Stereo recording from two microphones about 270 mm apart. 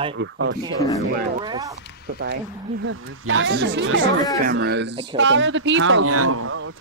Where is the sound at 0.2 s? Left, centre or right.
Right.